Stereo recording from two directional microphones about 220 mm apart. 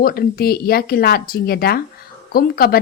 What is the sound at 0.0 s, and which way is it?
A woman's voice, 45° left (ahead or behind).